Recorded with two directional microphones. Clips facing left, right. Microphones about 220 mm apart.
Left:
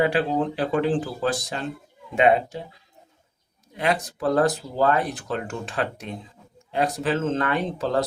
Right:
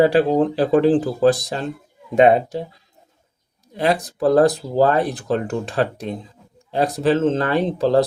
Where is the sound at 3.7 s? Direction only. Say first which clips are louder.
Right 5 dB; 35° right (ahead or behind).